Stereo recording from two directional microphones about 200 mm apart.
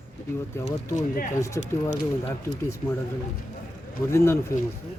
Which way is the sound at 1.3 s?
15° left (ahead or behind).